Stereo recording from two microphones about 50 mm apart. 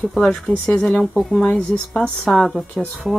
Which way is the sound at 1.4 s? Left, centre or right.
Left.